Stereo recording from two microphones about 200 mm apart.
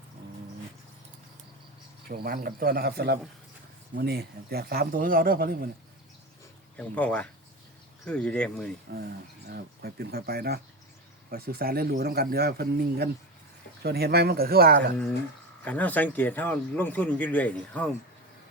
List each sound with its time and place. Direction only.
2.0 s speech: 45° right (ahead or behind)
6.7 s speech: 5° left (ahead or behind)
9.0 s speech: 50° right (ahead or behind)
15.6 s speech: 10° left (ahead or behind)